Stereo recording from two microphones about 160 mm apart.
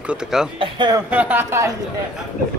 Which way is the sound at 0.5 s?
30° right (ahead or behind).